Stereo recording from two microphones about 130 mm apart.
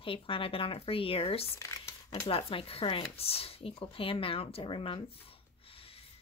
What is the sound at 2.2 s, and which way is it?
Speech, 45° left (ahead or behind).